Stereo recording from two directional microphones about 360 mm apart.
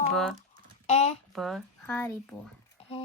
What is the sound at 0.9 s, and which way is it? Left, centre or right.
Female singing, centre.